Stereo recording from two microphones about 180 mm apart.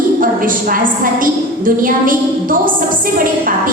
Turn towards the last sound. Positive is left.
turn(degrees=-50)  # may be behind; listen again after turning